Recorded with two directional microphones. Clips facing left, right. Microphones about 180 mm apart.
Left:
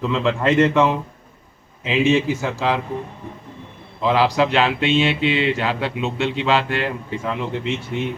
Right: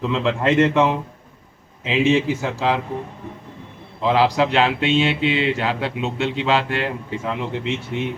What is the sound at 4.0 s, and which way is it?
Speech, 25° right (ahead or behind).